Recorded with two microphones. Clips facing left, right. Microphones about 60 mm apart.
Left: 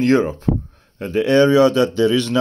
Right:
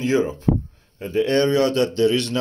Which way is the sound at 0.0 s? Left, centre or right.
Left.